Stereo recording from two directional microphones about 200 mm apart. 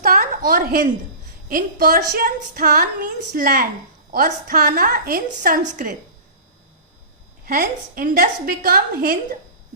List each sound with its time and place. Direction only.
0.0 s a sound: 45° right (ahead or behind)
1.5 s a woman's voice: 45° right (ahead or behind)
7.4 s a woman's voice: 45° right (ahead or behind)